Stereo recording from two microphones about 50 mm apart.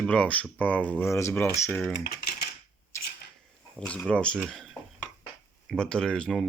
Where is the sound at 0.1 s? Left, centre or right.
Left.